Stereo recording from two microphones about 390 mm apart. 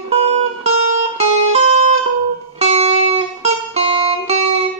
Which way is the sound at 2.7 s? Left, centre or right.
Centre.